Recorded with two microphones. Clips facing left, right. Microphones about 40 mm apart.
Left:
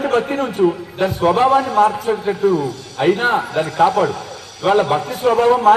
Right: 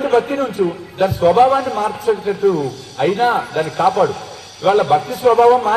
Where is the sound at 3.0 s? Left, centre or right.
Centre.